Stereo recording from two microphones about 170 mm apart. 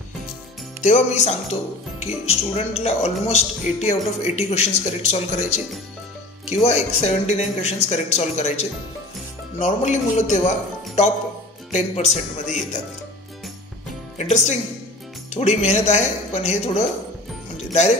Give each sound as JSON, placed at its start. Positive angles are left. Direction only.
{"t": 0.8, "sound": "speech", "side_deg": 45}
{"t": 6.5, "sound": "speech", "side_deg": 40}
{"t": 11.7, "sound": "speech", "side_deg": 40}
{"t": 14.1, "sound": "speech", "side_deg": 45}